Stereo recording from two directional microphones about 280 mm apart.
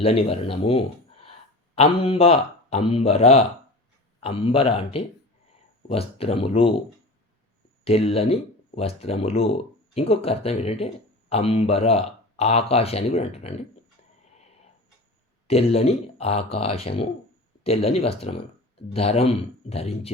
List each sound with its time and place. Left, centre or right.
0.0 s speech: left
7.9 s speech: left
15.4 s speech: left